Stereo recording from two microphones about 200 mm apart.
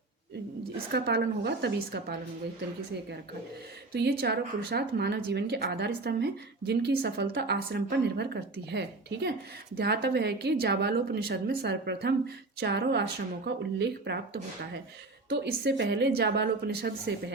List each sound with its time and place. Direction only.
0.9 s a woman's voice: 50° right (ahead or behind)
3.9 s a woman's voice: 55° right (ahead or behind)
15.3 s a woman's voice: 55° right (ahead or behind)